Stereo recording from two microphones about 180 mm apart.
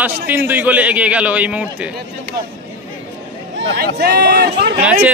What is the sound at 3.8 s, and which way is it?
Speech, 65° right (ahead or behind).